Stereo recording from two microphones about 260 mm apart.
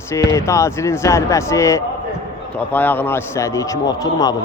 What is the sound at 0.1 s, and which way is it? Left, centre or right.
Speech, centre.